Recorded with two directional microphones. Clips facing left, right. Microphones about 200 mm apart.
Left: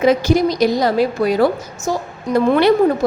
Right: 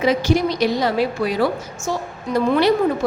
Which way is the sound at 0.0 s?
45° left (ahead or behind).